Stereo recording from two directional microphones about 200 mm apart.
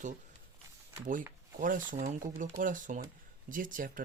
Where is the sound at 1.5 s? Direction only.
40° right (ahead or behind).